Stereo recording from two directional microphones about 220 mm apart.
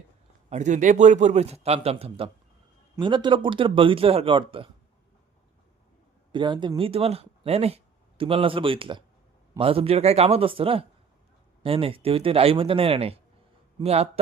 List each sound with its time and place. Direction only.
0.5 s speech: 35° right (ahead or behind)
6.3 s speech: 20° right (ahead or behind)